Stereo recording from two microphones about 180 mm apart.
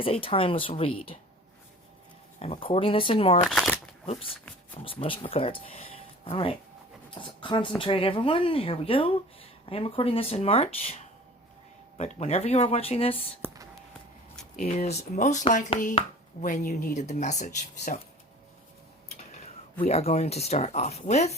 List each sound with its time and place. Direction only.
0.0 s speech: 30° left (ahead or behind)
2.4 s speech: 30° left (ahead or behind)
3.4 s speech: 5° right (ahead or behind)
4.0 s speech: 35° left (ahead or behind)
13.4 s whispering: 20° right (ahead or behind)
14.6 s speech: 45° left (ahead or behind)
19.8 s speech: 35° left (ahead or behind)